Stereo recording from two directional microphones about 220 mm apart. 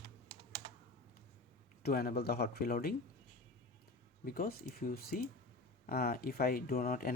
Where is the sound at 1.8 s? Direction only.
45° left (ahead or behind).